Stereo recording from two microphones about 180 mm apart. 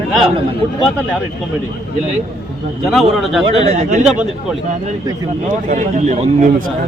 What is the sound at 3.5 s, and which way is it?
Speech, 35° right (ahead or behind).